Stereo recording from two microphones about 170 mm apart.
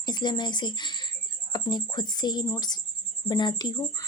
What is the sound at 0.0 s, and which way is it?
Speech, 25° left (ahead or behind).